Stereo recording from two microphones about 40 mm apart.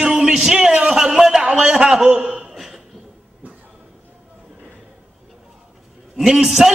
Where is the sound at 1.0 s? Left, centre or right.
Centre.